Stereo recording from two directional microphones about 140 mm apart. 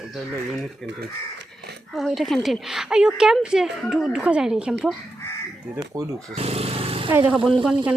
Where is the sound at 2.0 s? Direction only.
Centre (ahead or behind).